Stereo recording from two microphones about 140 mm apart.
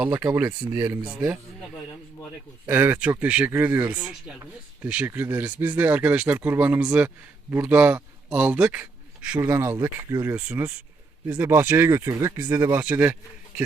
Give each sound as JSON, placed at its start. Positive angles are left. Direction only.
{"t": 0.1, "sound": "speech", "side_deg": -10}
{"t": 2.6, "sound": "a man's voice", "side_deg": -15}
{"t": 9.4, "sound": "speech", "side_deg": -20}
{"t": 12.7, "sound": "speech", "side_deg": -10}